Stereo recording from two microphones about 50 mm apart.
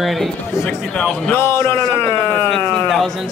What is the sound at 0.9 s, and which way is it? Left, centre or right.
Speech, centre.